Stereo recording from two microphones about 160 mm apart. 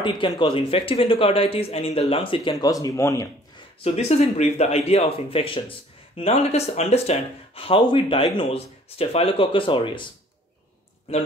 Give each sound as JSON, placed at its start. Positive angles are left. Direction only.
{"t": 0.0, "sound": "speech", "side_deg": 30}
{"t": 2.5, "sound": "speech", "side_deg": 20}
{"t": 3.8, "sound": "speech", "side_deg": 45}
{"t": 11.1, "sound": "speech", "side_deg": 40}